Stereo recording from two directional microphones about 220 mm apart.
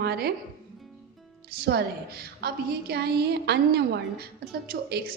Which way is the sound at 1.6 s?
45° right (ahead or behind).